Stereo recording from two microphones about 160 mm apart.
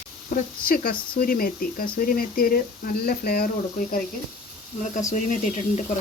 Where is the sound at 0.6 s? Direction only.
65° left (ahead or behind).